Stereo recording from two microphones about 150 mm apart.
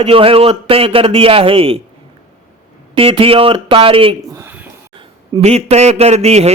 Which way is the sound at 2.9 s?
40° right (ahead or behind).